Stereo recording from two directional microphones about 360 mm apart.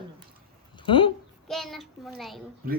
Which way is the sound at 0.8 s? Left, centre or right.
Centre.